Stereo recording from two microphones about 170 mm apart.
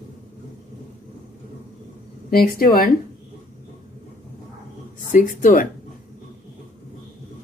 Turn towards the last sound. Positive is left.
turn(degrees=50)  # may be behind; listen again after turning